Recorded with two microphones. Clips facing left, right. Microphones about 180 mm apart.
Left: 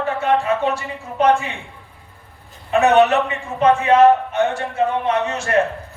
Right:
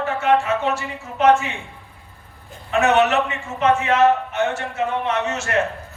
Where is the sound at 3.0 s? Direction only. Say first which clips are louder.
Left 2 dB; 35° left (ahead or behind).